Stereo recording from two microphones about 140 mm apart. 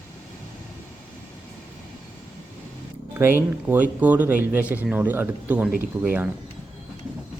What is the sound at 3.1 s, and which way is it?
Speech, 15° right (ahead or behind).